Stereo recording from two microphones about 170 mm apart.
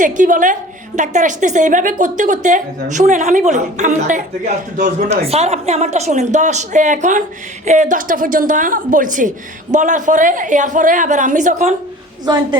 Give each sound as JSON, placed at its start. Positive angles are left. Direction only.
{"t": 0.0, "sound": "speech", "side_deg": -50}
{"t": 12.2, "sound": "a woman's voice", "side_deg": -25}